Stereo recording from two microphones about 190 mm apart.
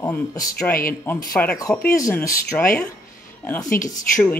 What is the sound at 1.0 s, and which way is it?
Speech, 5° left (ahead or behind).